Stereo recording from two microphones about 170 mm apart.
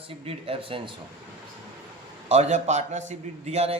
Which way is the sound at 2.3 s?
40° right (ahead or behind).